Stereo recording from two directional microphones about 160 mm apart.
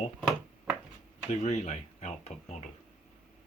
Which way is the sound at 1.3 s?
45° left (ahead or behind).